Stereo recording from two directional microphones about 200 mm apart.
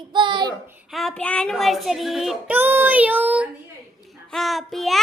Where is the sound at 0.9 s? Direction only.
Centre (ahead or behind).